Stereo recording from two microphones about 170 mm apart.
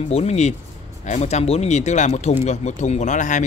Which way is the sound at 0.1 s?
40° left (ahead or behind).